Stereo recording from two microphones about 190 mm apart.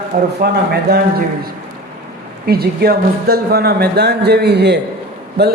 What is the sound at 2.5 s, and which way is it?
Speech, 55° right (ahead or behind).